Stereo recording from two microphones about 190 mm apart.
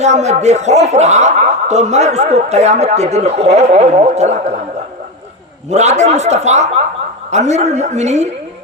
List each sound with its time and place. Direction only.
0.0 s speech: 35° right (ahead or behind)
5.7 s speech: 35° right (ahead or behind)